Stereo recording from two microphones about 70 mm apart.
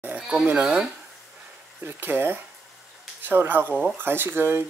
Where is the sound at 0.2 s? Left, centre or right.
Centre.